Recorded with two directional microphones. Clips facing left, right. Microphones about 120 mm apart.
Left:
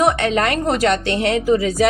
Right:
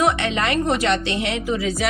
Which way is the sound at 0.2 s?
40° left (ahead or behind).